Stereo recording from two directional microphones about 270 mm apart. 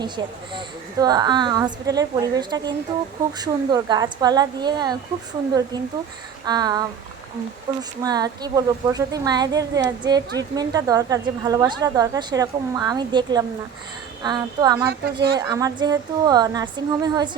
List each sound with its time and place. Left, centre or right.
0.2 s a woman's voice: centre
6.4 s a sound: centre
7.8 s a woman's voice: centre
14.8 s speech: right
15.4 s a woman's voice: centre